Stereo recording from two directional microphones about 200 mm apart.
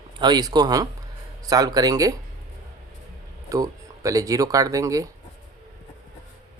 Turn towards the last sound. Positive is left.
turn(degrees=-15)  # may be behind; listen again after turning